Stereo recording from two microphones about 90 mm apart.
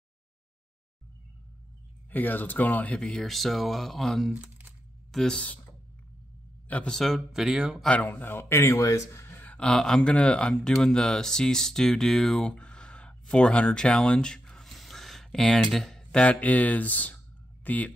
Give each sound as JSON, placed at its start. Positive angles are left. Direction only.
{"t": 2.0, "sound": "speech", "side_deg": 20}
{"t": 4.4, "sound": "a sound", "side_deg": -20}
{"t": 5.1, "sound": "speech", "side_deg": 5}
{"t": 6.9, "sound": "speech", "side_deg": 0}
{"t": 7.8, "sound": "speech", "side_deg": 15}
{"t": 8.1, "sound": "speech", "side_deg": 25}
{"t": 9.4, "sound": "speech", "side_deg": 15}